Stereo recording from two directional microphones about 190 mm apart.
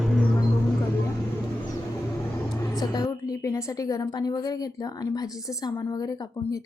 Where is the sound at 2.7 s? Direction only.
20° left (ahead or behind).